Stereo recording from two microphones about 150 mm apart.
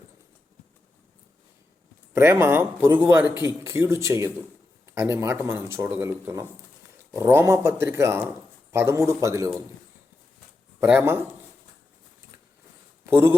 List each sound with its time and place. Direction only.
2.1 s a man's voice: 15° right (ahead or behind)
10.8 s speech: 15° right (ahead or behind)
13.1 s speech: 15° right (ahead or behind)